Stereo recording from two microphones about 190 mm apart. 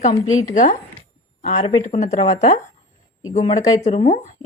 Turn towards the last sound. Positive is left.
turn(degrees=35)  # may be behind; listen again after turning